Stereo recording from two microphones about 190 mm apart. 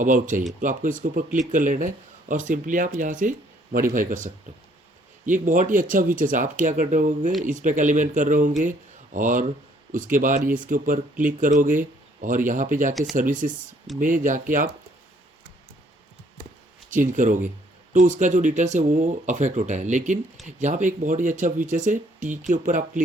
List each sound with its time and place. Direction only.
0.0 s speech: 45° right (ahead or behind)
12.9 s speech: centre (ahead or behind)
13.1 s speech: 45° right (ahead or behind)
16.9 s speech: 45° right (ahead or behind)